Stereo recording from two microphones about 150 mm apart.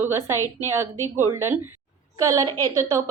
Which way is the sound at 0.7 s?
15° right (ahead or behind).